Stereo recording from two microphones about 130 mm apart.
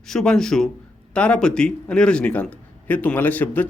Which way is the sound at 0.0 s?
5° left (ahead or behind).